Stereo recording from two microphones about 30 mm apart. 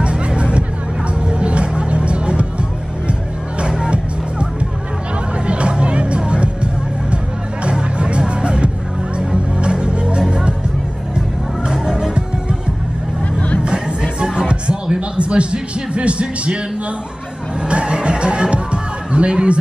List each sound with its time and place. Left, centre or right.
0.0 s music: right
3.6 s music: right
5.5 s music: right
11.7 s music: centre
15.0 s a sound: right
17.6 s music: right